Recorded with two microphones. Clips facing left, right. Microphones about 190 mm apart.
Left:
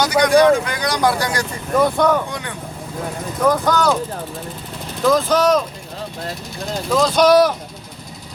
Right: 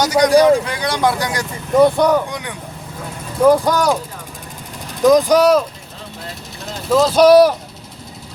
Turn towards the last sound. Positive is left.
turn(degrees=-10)  # may be behind; listen again after turning